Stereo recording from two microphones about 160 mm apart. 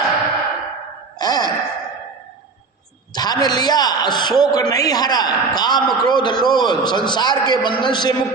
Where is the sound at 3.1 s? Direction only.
25° left (ahead or behind).